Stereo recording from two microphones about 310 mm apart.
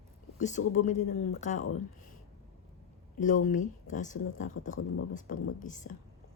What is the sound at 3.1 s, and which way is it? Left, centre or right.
Speech, left.